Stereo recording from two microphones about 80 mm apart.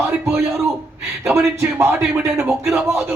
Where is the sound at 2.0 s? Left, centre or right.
Right.